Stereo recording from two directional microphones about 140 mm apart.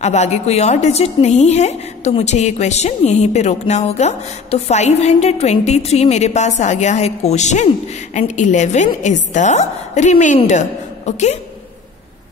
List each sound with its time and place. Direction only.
0.0 s a woman's voice: 55° left (ahead or behind)